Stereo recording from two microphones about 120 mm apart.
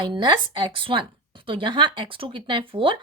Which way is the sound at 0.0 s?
40° right (ahead or behind).